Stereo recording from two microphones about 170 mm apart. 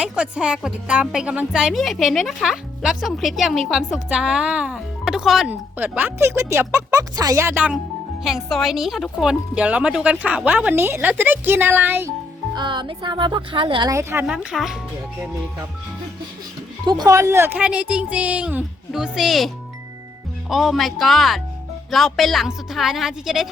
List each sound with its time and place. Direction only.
0.0 s speech: 5° right (ahead or behind)
12.5 s speech: 25° right (ahead or behind)
14.3 s speech: centre (ahead or behind)
16.8 s speech: 25° right (ahead or behind); by 19.5 s centre (ahead or behind)
20.5 s speech: centre (ahead or behind)